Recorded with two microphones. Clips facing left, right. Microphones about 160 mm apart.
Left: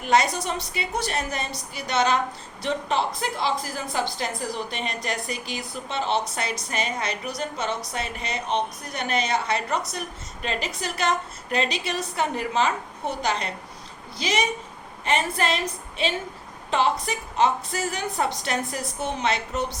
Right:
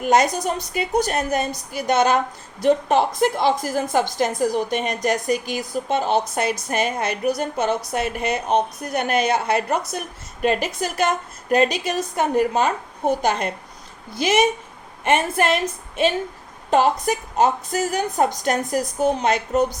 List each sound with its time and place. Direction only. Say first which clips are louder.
0.0 s a woman's voice: right 4 dB; 45° right (ahead or behind)
16.6 s a woman's voice: right 6 dB; 45° right (ahead or behind)